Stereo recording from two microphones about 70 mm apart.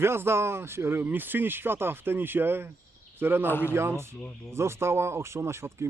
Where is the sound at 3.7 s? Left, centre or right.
Right.